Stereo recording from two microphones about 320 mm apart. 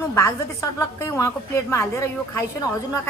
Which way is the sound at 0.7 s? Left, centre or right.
Centre.